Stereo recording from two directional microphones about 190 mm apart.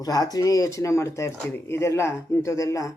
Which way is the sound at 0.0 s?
20° left (ahead or behind).